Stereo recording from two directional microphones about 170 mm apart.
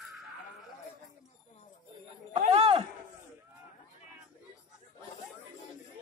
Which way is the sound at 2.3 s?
35° right (ahead or behind).